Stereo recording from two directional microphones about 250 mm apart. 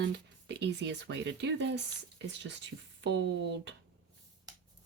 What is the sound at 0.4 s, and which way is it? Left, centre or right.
Speech, right.